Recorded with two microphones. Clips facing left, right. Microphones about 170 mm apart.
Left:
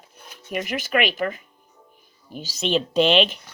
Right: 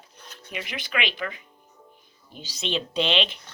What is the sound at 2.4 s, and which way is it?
Speech, 45° left (ahead or behind).